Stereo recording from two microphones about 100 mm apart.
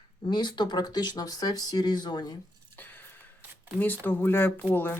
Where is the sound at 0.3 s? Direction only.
45° left (ahead or behind).